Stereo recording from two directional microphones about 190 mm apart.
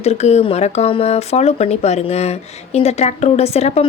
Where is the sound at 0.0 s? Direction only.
35° left (ahead or behind).